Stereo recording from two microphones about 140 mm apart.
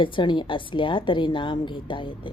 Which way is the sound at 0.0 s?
35° left (ahead or behind).